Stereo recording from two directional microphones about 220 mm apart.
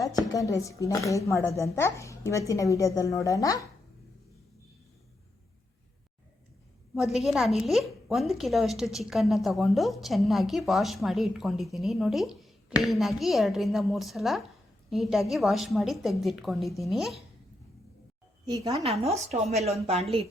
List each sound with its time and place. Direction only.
0.3 s speech: 15° left (ahead or behind)
6.9 s a woman's voice: centre (ahead or behind)
18.8 s a woman's voice: 30° right (ahead or behind)